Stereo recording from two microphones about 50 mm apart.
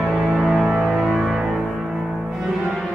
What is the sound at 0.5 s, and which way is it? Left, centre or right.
Music, centre.